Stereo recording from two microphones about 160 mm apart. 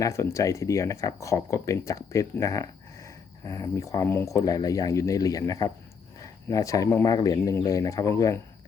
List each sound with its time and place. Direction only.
0.0 s speech: 15° left (ahead or behind)